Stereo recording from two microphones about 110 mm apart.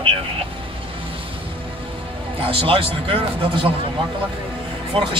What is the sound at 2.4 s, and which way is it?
Speech, 55° right (ahead or behind).